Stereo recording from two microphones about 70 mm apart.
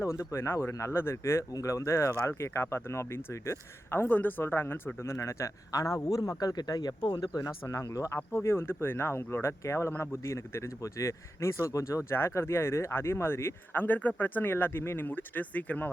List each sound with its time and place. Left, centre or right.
0.0 s speech: left
5.1 s a man's voice: left
7.4 s speech: left
8.3 s speech: left